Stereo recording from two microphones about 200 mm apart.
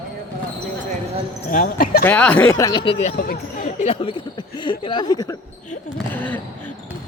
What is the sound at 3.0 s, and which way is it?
Speech, 45° left (ahead or behind).